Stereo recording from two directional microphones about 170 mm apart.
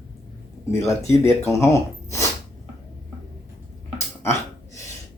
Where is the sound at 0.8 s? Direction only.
15° left (ahead or behind).